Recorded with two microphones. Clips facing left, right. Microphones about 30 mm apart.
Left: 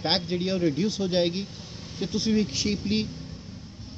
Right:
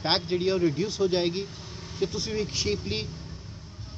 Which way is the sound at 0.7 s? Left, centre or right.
Centre.